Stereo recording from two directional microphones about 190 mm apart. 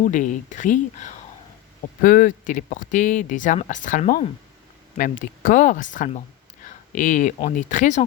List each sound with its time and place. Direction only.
0.0 s speech: 45° left (ahead or behind)